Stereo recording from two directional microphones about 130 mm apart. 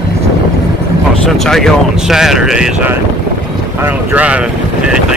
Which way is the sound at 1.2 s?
5° left (ahead or behind).